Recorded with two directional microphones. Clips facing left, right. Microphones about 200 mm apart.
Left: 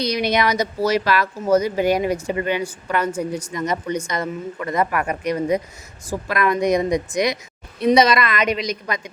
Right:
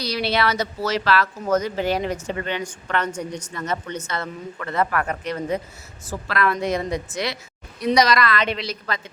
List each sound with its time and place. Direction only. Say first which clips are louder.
0.0 s speech: left 3 dB; 20° left (ahead or behind)